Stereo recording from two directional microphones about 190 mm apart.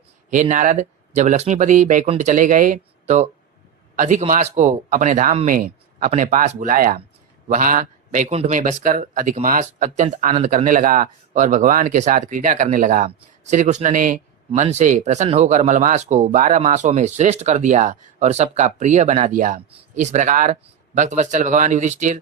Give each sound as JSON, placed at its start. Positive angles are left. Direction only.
{"t": 0.3, "sound": "a man's voice", "side_deg": -40}